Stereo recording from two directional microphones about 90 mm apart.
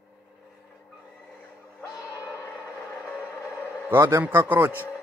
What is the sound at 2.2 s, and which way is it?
Music, 35° left (ahead or behind).